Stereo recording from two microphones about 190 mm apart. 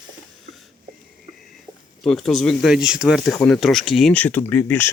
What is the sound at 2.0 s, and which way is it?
Speech, centre (ahead or behind).